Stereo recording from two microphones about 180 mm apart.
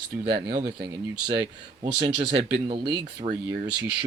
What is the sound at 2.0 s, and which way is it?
Speech, 30° right (ahead or behind).